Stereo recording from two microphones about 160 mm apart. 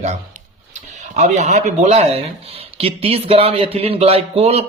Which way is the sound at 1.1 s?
45° right (ahead or behind).